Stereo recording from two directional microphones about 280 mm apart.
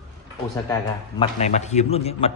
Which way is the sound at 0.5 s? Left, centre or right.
Centre.